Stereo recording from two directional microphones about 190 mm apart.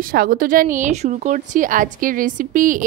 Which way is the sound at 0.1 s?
50° right (ahead or behind).